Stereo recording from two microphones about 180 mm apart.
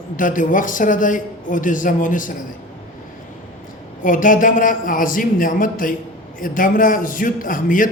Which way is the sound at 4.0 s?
50° left (ahead or behind).